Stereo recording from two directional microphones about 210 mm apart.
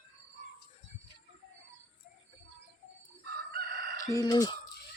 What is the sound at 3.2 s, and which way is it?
Chicken, 45° right (ahead or behind).